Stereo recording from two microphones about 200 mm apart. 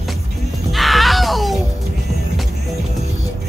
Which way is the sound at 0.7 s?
Centre (ahead or behind).